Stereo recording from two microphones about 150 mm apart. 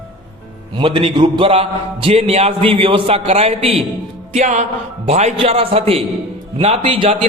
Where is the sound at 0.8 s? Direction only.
35° right (ahead or behind).